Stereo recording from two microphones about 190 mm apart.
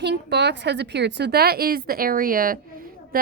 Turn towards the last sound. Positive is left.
turn(degrees=-50)  # may be behind; listen again after turning